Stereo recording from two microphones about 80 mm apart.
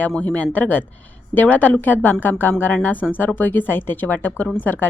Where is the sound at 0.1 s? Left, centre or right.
Centre.